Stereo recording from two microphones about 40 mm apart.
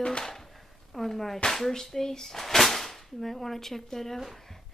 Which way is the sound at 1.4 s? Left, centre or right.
Centre.